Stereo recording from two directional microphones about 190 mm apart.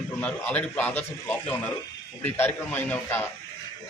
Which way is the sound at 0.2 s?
5° left (ahead or behind).